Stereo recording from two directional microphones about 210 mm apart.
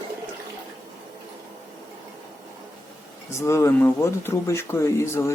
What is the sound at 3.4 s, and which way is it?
Speech, 10° left (ahead or behind).